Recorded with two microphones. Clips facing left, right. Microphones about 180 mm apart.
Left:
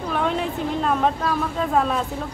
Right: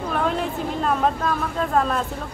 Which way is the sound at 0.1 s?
Centre (ahead or behind).